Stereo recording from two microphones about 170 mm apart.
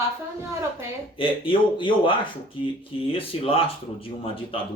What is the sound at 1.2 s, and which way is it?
Speech, 30° left (ahead or behind).